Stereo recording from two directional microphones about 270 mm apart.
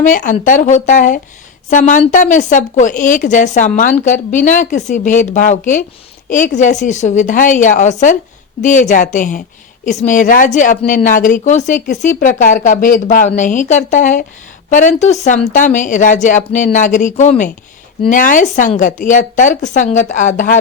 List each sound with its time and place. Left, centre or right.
0.0 s a woman's voice: left